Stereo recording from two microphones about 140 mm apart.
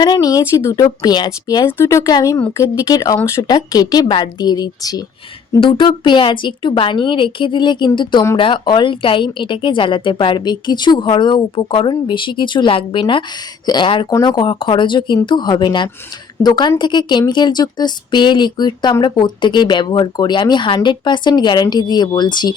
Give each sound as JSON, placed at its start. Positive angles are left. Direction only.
{"t": 0.0, "sound": "speech", "side_deg": 25}
{"t": 1.6, "sound": "a woman's voice", "side_deg": 20}